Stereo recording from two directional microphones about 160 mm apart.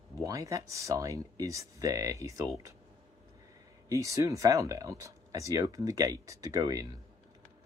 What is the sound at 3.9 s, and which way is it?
Speech, 20° right (ahead or behind).